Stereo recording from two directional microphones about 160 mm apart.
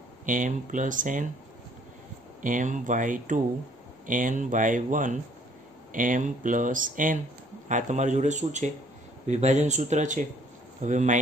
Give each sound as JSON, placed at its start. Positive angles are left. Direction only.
{"t": 0.2, "sound": "speech", "side_deg": -55}
{"t": 2.4, "sound": "speech", "side_deg": -55}